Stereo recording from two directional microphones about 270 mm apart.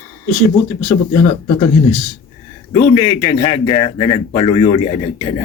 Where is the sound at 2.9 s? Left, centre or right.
Centre.